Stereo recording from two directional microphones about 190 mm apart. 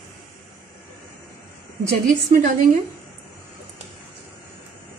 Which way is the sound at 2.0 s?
45° right (ahead or behind).